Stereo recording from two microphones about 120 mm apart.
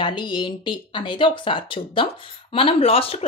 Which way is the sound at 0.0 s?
40° left (ahead or behind).